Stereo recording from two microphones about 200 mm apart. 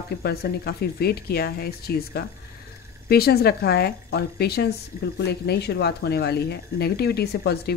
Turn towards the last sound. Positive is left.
turn(degrees=55)  # may be behind; listen again after turning